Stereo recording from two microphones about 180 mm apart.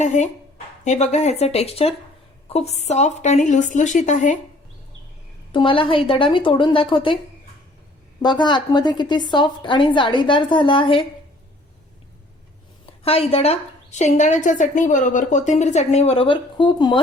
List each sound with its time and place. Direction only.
0.0 s a woman's voice: 40° left (ahead or behind)
5.5 s a woman's voice: 30° left (ahead or behind)
8.2 s a woman's voice: 25° left (ahead or behind)
12.8 s a woman's voice: 30° left (ahead or behind)